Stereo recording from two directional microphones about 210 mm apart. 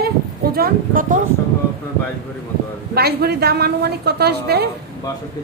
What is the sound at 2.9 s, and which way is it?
A woman's voice, 50° right (ahead or behind).